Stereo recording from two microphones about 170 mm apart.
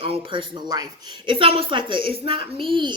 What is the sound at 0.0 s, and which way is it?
A woman's voice, 30° right (ahead or behind).